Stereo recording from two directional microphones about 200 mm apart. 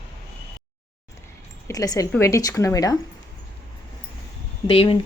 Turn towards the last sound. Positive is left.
turn(degrees=30)  # may be behind; listen again after turning